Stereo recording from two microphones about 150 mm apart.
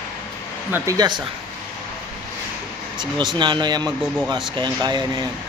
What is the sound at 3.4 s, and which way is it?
Speech, 30° right (ahead or behind).